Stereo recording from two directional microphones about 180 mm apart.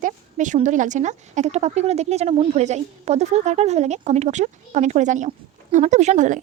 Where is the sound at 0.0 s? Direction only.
45° right (ahead or behind).